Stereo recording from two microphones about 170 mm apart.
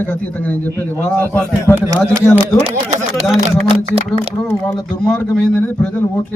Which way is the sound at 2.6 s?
40° right (ahead or behind).